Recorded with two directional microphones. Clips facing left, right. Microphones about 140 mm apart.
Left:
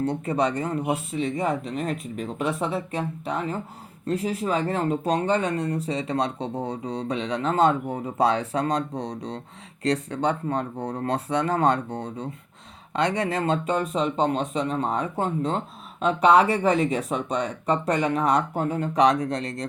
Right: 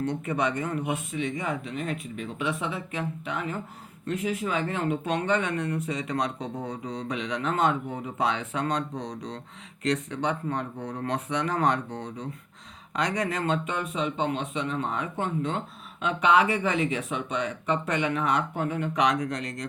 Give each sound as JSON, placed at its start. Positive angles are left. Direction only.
{"t": 0.0, "sound": "speech", "side_deg": 35}